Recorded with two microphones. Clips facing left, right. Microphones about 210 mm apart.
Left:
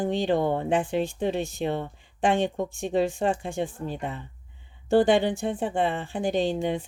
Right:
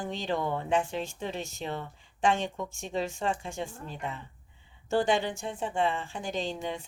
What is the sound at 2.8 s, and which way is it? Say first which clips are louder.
A woman's voice: left 7 dB; 60° left (ahead or behind).